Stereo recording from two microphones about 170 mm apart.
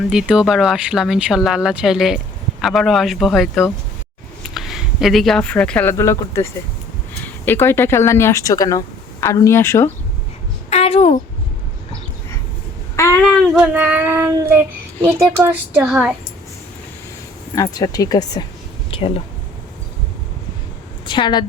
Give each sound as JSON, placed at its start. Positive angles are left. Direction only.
{"t": 0.1, "sound": "speech", "side_deg": -5}
{"t": 10.7, "sound": "a sound", "side_deg": 35}
{"t": 13.2, "sound": "child singing", "side_deg": -5}
{"t": 17.5, "sound": "speech", "side_deg": 20}
{"t": 18.9, "sound": "a sound", "side_deg": 35}
{"t": 21.1, "sound": "a woman's voice", "side_deg": 25}